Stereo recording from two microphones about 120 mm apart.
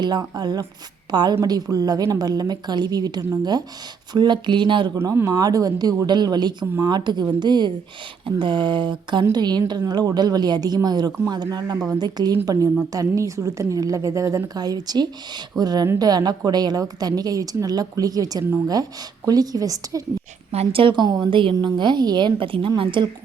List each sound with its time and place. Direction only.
0.0 s a woman's voice: 35° right (ahead or behind)
4.9 s a woman's voice: 25° right (ahead or behind)
20.5 s a woman's voice: 55° right (ahead or behind)